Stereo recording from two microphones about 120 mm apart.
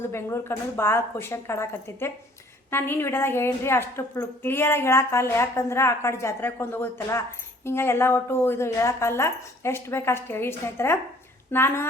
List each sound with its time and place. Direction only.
0.1 s a woman's voice: 20° left (ahead or behind)